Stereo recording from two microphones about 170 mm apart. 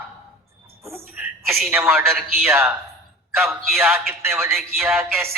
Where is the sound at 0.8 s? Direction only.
15° right (ahead or behind).